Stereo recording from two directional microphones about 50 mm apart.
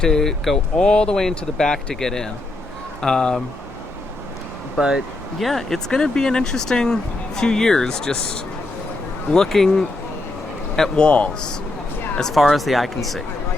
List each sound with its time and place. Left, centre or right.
0.0 s speech: centre
5.4 s speech: centre
9.3 s a man's voice: centre
11.0 s speech: left
12.3 s speech: centre